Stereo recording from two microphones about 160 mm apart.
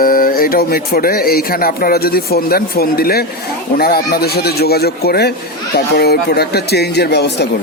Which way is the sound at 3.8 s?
75° left (ahead or behind).